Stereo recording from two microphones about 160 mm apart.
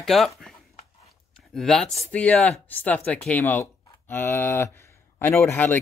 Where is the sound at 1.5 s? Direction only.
Centre (ahead or behind).